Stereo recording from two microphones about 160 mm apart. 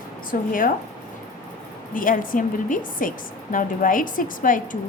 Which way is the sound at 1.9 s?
60° left (ahead or behind).